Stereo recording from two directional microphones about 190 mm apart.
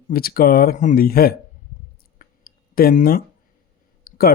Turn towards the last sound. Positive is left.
turn(degrees=50)  # may be behind; listen again after turning